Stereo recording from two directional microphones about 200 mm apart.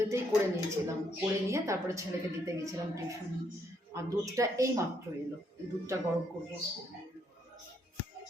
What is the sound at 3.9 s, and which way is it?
Speech, 15° right (ahead or behind).